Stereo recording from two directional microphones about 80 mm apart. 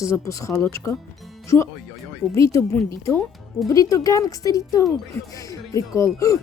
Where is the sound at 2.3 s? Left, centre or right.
Left.